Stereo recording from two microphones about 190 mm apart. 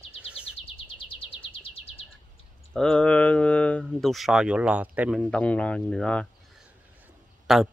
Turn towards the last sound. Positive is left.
turn(degrees=0)  # may be behind; listen again after turning